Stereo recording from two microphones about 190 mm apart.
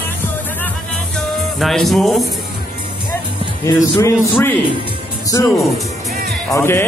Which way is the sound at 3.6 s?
20° left (ahead or behind).